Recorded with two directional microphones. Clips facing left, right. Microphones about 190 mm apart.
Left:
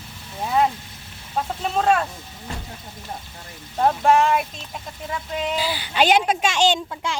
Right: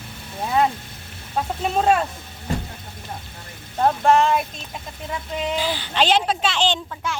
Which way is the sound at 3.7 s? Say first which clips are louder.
Even; 5° left (ahead or behind).